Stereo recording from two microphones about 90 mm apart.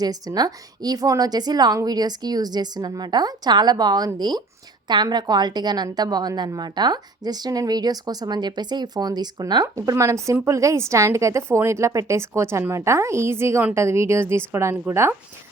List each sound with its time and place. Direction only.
0.0 s a woman's voice: 45° right (ahead or behind); by 15.1 s 30° right (ahead or behind)